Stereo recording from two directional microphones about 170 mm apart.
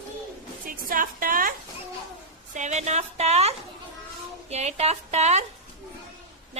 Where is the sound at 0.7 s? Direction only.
55° right (ahead or behind).